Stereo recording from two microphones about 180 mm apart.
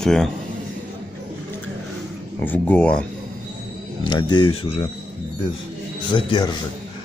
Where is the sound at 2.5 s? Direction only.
10° left (ahead or behind).